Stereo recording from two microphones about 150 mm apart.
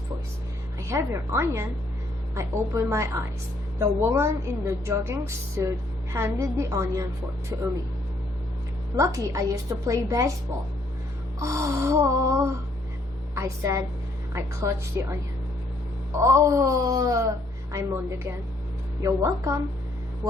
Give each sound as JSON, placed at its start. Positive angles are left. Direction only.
{"t": 0.8, "sound": "a woman's voice", "side_deg": -20}
{"t": 9.0, "sound": "speech", "side_deg": -20}
{"t": 11.3, "sound": "speech", "side_deg": -20}
{"t": 13.3, "sound": "speech", "side_deg": -20}